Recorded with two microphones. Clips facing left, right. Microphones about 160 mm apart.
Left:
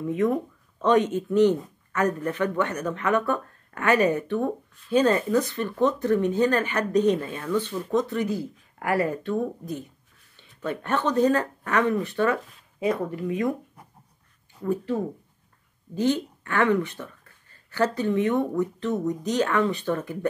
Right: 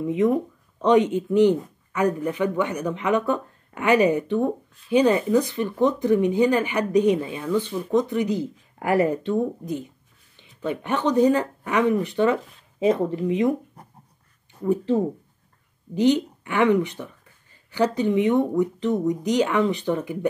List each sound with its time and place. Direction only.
0.0 s speech: 15° right (ahead or behind)
14.6 s speech: 25° right (ahead or behind)